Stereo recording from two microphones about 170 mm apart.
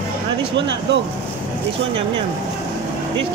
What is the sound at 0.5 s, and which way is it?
Speech, 90° right.